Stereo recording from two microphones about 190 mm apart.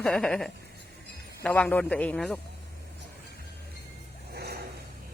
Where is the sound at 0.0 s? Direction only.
Centre (ahead or behind).